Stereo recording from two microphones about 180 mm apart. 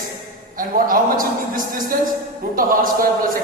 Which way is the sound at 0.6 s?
50° right (ahead or behind).